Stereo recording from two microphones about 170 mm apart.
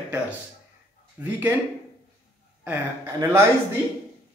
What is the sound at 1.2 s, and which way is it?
Speech, 15° right (ahead or behind).